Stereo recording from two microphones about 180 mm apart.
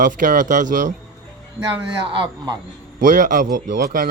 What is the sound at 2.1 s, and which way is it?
Speech, 25° right (ahead or behind).